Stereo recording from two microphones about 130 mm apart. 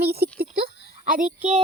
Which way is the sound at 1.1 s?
90° right.